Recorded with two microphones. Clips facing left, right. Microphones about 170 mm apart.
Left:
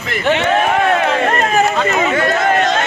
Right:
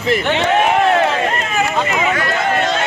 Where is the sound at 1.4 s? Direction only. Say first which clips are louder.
Left 4 dB; 40° left (ahead or behind).